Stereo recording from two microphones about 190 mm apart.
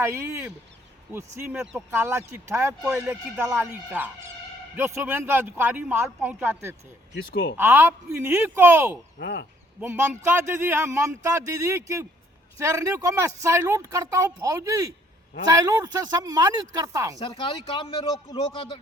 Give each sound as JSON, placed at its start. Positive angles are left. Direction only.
{"t": 0.0, "sound": "speech", "side_deg": -15}
{"t": 7.2, "sound": "speech", "side_deg": 55}
{"t": 7.5, "sound": "speech", "side_deg": -10}
{"t": 9.1, "sound": "speech", "side_deg": 60}
{"t": 9.8, "sound": "speech", "side_deg": -10}
{"t": 17.2, "sound": "speech", "side_deg": 25}